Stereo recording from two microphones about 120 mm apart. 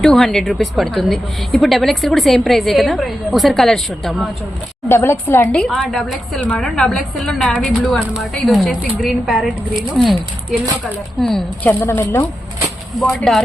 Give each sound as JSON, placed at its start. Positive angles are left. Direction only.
{"t": 0.0, "sound": "a woman's voice", "side_deg": 0}
{"t": 4.9, "sound": "a woman's voice", "side_deg": 25}
{"t": 5.5, "sound": "a woman's voice", "side_deg": 10}
{"t": 11.2, "sound": "a woman's voice", "side_deg": 5}
{"t": 11.7, "sound": "speech", "side_deg": 20}
{"t": 13.0, "sound": "a woman's voice", "side_deg": 0}